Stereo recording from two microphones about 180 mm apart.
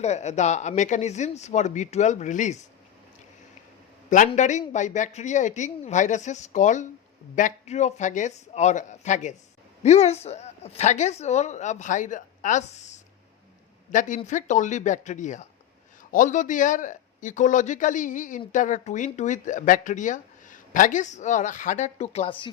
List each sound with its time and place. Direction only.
0.0 s a woman's voice: 40° left (ahead or behind)
4.3 s a woman's voice: 40° left (ahead or behind)